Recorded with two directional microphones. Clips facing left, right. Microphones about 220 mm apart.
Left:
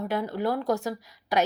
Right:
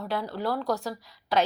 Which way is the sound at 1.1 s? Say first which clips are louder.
Right 1 dB; 15° left (ahead or behind).